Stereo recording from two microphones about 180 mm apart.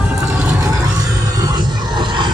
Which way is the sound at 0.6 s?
15° right (ahead or behind).